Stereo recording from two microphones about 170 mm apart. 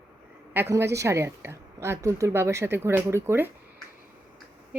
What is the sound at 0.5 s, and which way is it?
A woman's voice, 15° right (ahead or behind).